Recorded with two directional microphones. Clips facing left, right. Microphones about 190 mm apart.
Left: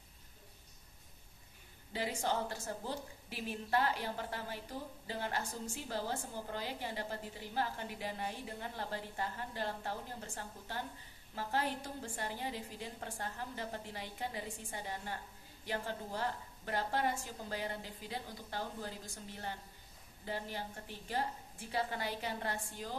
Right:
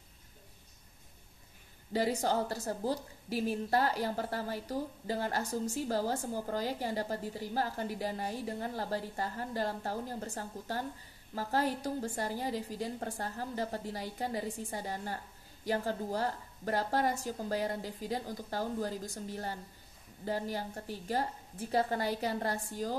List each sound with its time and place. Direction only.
1.9 s a woman's voice: 40° right (ahead or behind)